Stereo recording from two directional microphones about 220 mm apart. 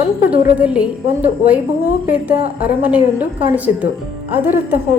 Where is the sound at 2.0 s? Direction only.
5° right (ahead or behind).